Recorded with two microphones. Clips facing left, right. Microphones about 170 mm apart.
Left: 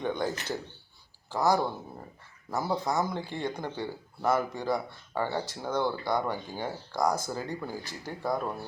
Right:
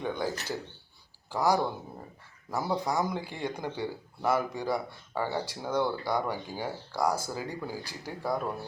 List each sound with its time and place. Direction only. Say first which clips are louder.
0.0 s speech: left 1 dB; 5° right (ahead or behind)